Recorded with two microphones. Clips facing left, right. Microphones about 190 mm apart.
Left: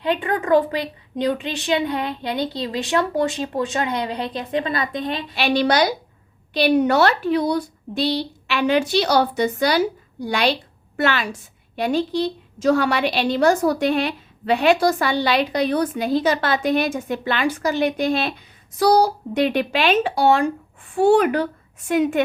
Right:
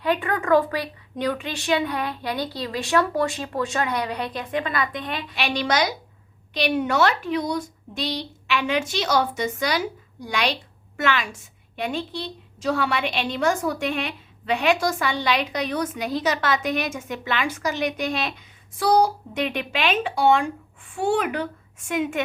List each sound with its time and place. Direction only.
0.0 s a woman's voice: 25° left (ahead or behind)